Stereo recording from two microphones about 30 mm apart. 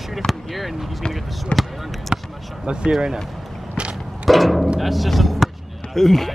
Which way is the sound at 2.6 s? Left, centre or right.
Right.